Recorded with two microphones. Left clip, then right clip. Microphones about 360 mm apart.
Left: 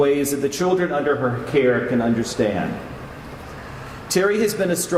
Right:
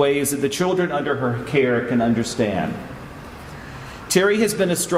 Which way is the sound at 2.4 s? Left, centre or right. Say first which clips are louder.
Left 2 dB; right.